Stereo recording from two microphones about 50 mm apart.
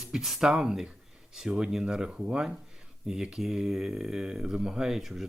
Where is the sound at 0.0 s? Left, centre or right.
Centre.